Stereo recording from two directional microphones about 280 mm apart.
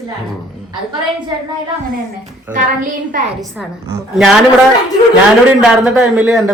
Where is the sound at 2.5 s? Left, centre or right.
Right.